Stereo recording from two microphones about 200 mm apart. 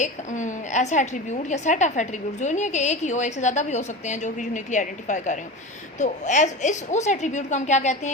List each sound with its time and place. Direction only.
0.0 s a woman's voice: 40° left (ahead or behind)